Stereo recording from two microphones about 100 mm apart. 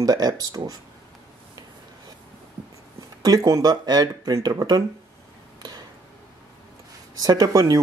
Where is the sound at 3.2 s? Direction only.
40° right (ahead or behind).